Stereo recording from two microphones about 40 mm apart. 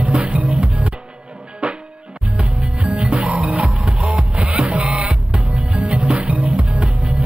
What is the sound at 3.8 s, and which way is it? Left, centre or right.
Music, centre.